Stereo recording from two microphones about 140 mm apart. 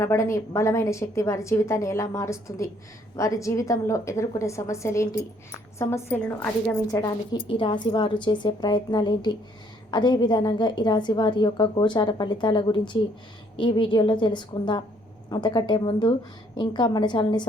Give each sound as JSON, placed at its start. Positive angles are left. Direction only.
{"t": 0.0, "sound": "a woman's voice", "side_deg": 20}
{"t": 7.4, "sound": "a woman's voice", "side_deg": 35}